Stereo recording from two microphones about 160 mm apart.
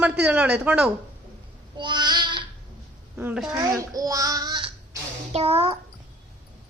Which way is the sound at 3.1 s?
10° right (ahead or behind).